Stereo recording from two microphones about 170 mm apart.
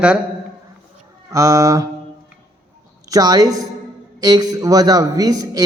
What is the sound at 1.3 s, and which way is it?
Speech, 20° right (ahead or behind).